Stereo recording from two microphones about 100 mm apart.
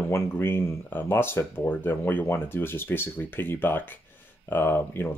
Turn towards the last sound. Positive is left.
turn(degrees=20)  # may be behind; listen again after turning